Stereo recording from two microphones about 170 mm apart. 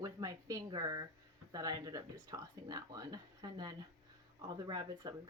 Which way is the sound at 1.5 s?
20° right (ahead or behind).